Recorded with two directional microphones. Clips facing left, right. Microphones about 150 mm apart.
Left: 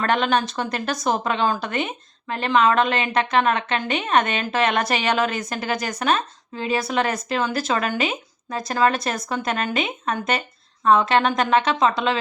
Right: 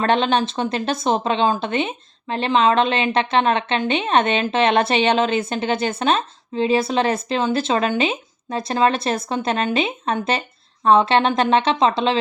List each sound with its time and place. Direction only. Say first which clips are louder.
0.0 s speech: right 3 dB; 25° right (ahead or behind)